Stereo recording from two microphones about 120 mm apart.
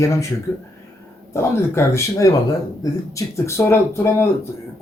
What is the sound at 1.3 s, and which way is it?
Speech, 25° left (ahead or behind).